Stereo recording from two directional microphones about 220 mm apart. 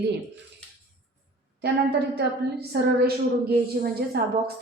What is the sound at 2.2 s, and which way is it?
A woman's voice, 45° right (ahead or behind).